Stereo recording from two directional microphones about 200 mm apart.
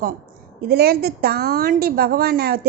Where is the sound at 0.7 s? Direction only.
50° right (ahead or behind).